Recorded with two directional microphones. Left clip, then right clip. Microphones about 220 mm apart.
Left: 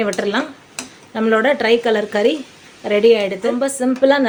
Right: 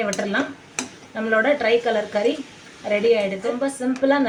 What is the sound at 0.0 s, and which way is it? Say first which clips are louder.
A woman's voice: left 4 dB; 50° left (ahead or behind).